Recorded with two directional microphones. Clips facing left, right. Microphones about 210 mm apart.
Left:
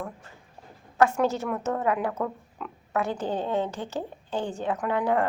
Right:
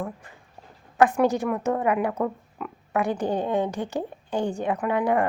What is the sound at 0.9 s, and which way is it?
A woman's voice, 15° right (ahead or behind).